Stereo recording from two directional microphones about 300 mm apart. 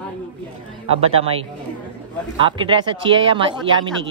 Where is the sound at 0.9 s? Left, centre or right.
Centre.